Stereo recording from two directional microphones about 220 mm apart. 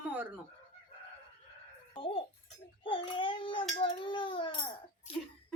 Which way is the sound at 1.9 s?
25° left (ahead or behind).